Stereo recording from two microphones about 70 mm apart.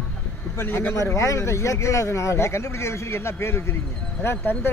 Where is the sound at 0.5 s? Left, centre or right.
Left.